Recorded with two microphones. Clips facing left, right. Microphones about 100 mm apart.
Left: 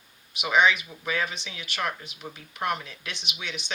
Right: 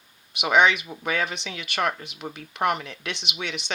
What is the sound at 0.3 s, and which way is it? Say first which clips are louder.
Speech: right 3 dB; 70° right (ahead or behind).